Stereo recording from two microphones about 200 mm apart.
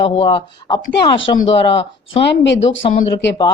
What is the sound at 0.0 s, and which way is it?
Speech, 25° left (ahead or behind).